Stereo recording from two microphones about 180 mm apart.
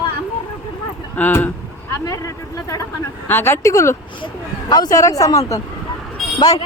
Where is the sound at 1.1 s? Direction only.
10° left (ahead or behind).